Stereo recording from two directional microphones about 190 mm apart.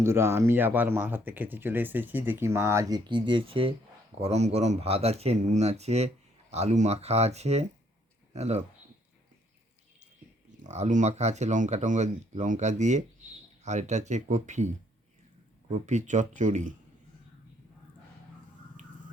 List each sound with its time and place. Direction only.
0.0 s speech: 15° right (ahead or behind); by 8.6 s 35° right (ahead or behind)
10.6 s speech: 40° right (ahead or behind)
15.7 s speech: 40° right (ahead or behind)